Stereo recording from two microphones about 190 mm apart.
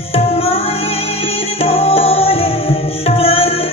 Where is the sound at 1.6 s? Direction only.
30° left (ahead or behind).